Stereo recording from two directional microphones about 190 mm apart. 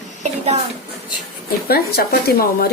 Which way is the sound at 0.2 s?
35° right (ahead or behind).